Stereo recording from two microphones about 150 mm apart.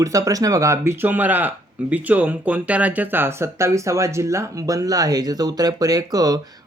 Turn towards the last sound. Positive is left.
turn(degrees=-25)  # may be behind; listen again after turning